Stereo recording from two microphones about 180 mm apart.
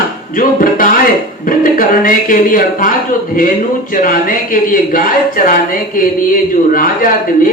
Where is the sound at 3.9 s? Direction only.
50° left (ahead or behind).